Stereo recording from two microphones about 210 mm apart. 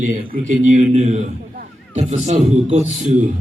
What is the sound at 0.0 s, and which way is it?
A man's voice, 35° right (ahead or behind).